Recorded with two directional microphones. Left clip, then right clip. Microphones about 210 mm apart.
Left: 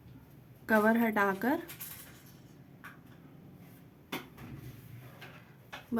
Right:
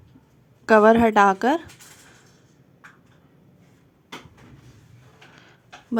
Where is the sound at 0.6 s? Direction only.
35° right (ahead or behind).